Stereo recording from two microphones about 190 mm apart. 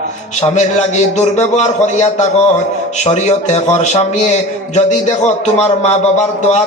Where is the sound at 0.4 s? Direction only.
40° left (ahead or behind).